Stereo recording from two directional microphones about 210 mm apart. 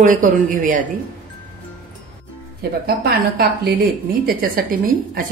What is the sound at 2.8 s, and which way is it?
A woman's voice, 45° right (ahead or behind).